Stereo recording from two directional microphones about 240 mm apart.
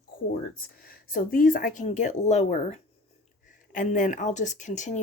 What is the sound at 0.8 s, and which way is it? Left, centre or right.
Speech, left.